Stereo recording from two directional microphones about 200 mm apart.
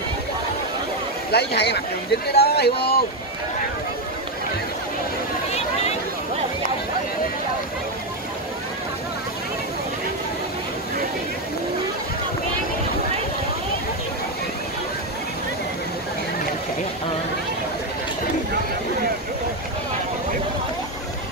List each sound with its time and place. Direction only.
1.3 s speech: 55° left (ahead or behind)